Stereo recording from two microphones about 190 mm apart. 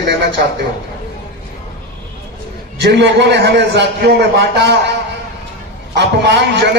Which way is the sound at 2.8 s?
65° right (ahead or behind).